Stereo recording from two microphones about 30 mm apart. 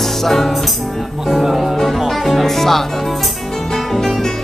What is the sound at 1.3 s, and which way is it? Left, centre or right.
Music, centre.